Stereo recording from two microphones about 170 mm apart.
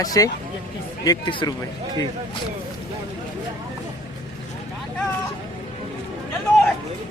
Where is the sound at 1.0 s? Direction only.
25° left (ahead or behind).